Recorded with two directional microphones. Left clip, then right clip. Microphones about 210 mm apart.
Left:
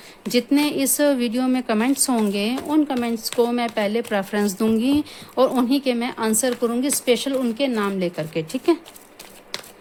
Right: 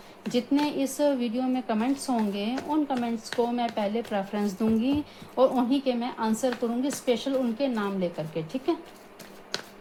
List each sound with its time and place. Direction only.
0.3 s a woman's voice: 50° left (ahead or behind)